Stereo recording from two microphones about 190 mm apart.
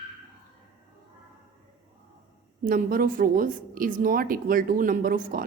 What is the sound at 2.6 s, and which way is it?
A woman's voice, 50° right (ahead or behind).